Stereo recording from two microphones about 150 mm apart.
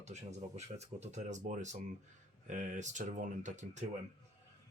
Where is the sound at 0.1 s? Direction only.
50° right (ahead or behind).